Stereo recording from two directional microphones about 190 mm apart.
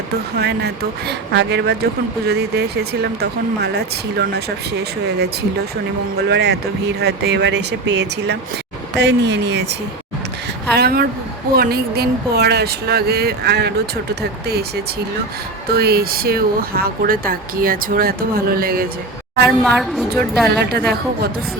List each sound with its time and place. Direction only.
0.3 s speech: 60° right (ahead or behind)
10.8 s speech: 55° right (ahead or behind)
15.7 s speech: 55° right (ahead or behind)
19.5 s a woman's voice: centre (ahead or behind)
20.6 s speech: 60° right (ahead or behind)